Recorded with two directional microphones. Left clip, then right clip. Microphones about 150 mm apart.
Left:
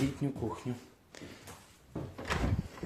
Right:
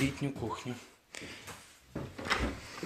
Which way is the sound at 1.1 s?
25° left (ahead or behind).